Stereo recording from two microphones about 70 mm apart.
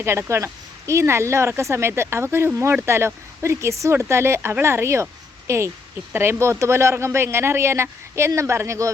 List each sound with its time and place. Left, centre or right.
0.0 s speech: right